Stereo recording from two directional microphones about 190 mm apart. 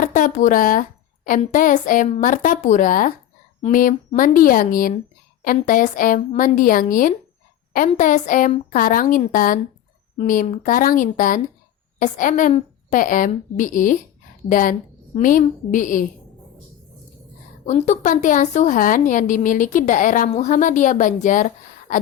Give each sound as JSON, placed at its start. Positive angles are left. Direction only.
{"t": 0.0, "sound": "a woman's voice", "side_deg": 45}
{"t": 17.7, "sound": "a woman's voice", "side_deg": 40}